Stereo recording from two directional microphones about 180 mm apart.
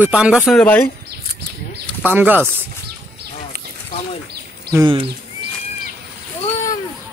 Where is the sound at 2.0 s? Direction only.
10° right (ahead or behind).